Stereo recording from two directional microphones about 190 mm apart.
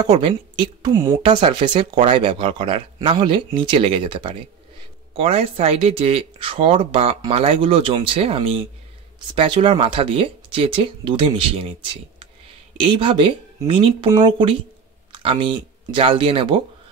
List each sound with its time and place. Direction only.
0.0 s speech: 25° right (ahead or behind)